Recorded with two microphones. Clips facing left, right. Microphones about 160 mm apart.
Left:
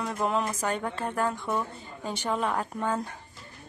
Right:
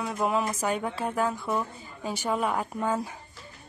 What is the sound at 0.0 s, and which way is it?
A woman's voice, 5° right (ahead or behind).